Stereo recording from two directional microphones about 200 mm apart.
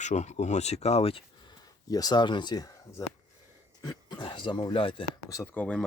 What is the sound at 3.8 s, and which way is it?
Speech, 20° left (ahead or behind).